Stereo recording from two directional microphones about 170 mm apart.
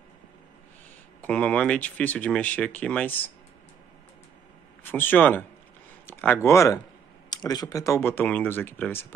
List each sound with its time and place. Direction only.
1.2 s speech: 5° left (ahead or behind)
4.8 s speech: 10° left (ahead or behind)